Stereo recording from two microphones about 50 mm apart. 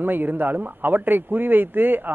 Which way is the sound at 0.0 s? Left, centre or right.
Right.